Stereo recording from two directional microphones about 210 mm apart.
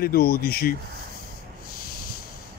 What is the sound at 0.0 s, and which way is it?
Speech, 45° left (ahead or behind).